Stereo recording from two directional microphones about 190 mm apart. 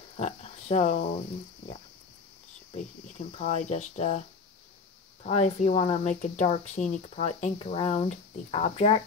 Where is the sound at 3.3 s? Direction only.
40° left (ahead or behind).